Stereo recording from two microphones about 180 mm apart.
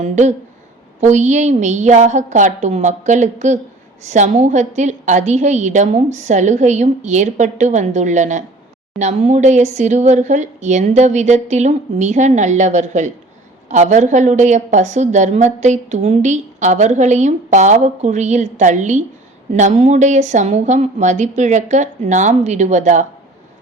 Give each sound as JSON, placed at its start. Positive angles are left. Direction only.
{"t": 0.0, "sound": "a woman's voice", "side_deg": -40}